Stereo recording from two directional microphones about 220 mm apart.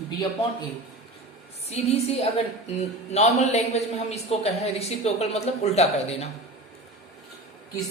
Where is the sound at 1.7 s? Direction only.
30° left (ahead or behind).